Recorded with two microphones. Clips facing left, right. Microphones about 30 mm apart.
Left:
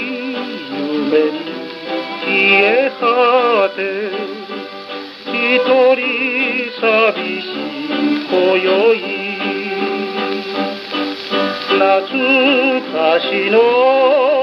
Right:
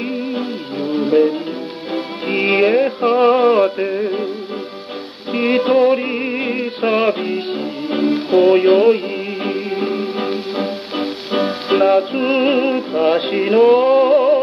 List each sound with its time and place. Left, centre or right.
0.3 s music: centre
3.1 s a sound: left
4.0 s music: centre
5.3 s music: centre
12.6 s music: centre